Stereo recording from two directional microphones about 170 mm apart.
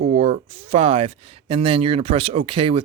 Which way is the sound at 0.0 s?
35° right (ahead or behind).